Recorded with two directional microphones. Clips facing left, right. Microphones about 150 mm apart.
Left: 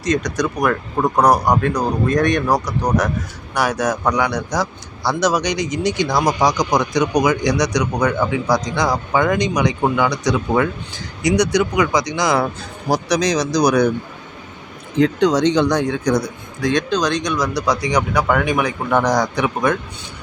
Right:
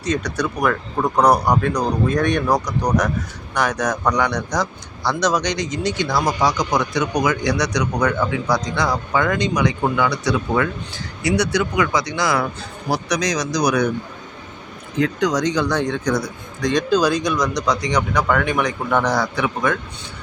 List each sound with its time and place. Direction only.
0.2 s a man's voice: 10° left (ahead or behind)
12.9 s speech: 30° left (ahead or behind)
15.0 s speech: 25° left (ahead or behind)
15.8 s a man's voice: 10° left (ahead or behind)
16.6 s speech: 5° left (ahead or behind)
16.9 s a man's voice: 5° right (ahead or behind); by 19.7 s 15° left (ahead or behind)